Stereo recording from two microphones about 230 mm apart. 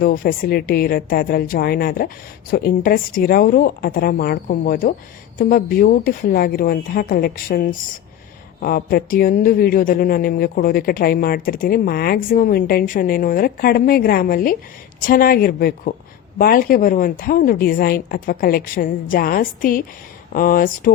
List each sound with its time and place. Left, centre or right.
0.0 s a woman's voice: left